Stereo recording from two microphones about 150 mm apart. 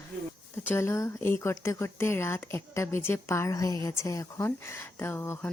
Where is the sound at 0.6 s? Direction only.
20° left (ahead or behind).